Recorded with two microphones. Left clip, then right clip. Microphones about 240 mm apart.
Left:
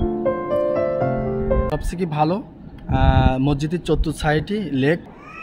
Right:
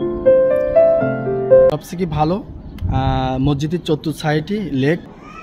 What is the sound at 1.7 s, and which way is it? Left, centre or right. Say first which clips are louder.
A man's voice: right 3 dB; centre.